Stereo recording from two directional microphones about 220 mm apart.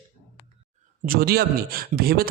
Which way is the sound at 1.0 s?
40° right (ahead or behind).